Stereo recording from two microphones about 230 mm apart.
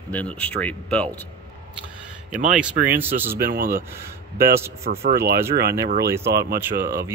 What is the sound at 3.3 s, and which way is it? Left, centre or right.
Speech, right.